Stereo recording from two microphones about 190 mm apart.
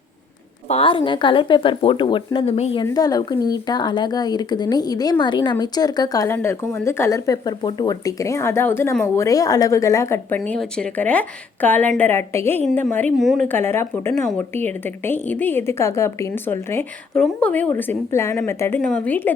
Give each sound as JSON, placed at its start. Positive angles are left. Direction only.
{"t": 0.7, "sound": "speech", "side_deg": 30}
{"t": 2.8, "sound": "speech", "side_deg": 20}